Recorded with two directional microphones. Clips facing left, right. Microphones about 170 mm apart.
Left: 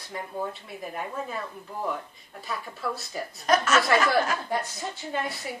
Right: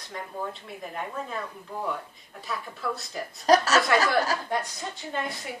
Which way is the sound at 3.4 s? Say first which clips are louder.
Right 3 dB; 35° right (ahead or behind).